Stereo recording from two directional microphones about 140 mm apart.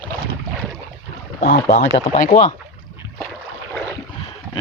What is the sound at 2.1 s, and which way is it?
Speech, 60° left (ahead or behind).